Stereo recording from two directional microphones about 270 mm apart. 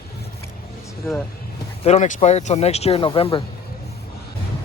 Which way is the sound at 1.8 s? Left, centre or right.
Left.